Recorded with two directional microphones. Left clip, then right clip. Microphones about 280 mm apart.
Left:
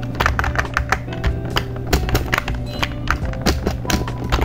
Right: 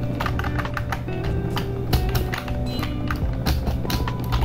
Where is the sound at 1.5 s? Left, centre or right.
Left.